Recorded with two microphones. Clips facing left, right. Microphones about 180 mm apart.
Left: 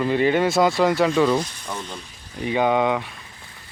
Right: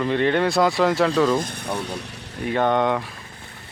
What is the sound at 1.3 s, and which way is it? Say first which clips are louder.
Speech: right 1 dB; 55° right (ahead or behind).